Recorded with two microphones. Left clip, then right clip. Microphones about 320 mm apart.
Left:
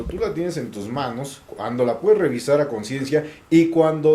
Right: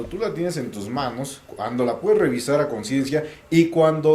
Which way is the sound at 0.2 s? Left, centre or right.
Left.